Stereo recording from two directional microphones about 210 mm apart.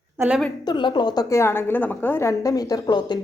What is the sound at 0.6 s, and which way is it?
A woman's voice, 20° left (ahead or behind).